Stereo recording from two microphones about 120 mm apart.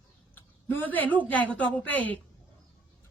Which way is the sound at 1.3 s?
10° left (ahead or behind).